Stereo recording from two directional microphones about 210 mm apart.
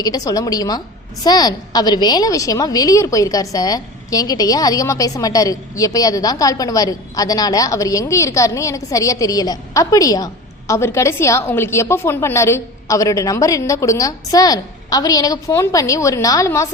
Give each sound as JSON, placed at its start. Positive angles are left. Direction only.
{"t": 0.0, "sound": "a woman's voice", "side_deg": 15}